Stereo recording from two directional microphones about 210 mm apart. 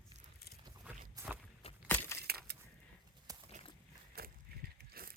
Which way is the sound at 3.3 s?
15° right (ahead or behind).